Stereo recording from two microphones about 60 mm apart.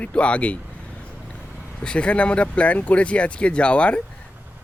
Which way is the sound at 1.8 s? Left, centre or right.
Centre.